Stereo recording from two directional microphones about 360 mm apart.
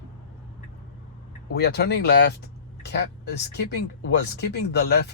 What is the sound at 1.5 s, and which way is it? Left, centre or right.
Speech, left.